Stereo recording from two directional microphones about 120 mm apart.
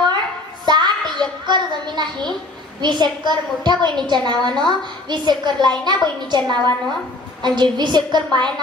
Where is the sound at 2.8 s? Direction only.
35° right (ahead or behind).